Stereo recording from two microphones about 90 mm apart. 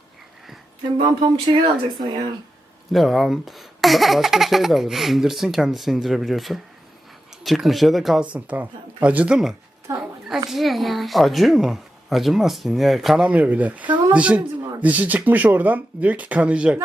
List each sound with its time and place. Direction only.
1.5 s speech: 55° right (ahead or behind)
2.9 s speech: centre (ahead or behind)
8.2 s speech: 15° right (ahead or behind)
9.9 s a sound: 30° right (ahead or behind)
10.2 s speech: 5° right (ahead or behind)
13.2 s speech: 15° right (ahead or behind)